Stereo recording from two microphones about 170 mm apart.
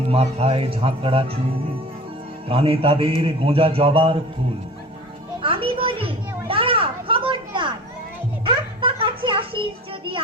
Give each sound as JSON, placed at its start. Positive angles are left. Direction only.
{"t": 0.1, "sound": "speech", "side_deg": -35}
{"t": 2.5, "sound": "speech", "side_deg": -35}
{"t": 5.4, "sound": "children playing", "side_deg": -30}
{"t": 6.5, "sound": "a sound", "side_deg": -30}